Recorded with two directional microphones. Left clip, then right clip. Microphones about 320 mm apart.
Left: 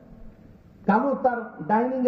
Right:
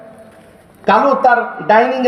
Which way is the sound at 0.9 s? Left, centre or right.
Right.